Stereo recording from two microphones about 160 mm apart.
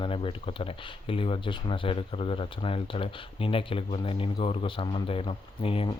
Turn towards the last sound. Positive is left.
turn(degrees=35)  # may be behind; listen again after turning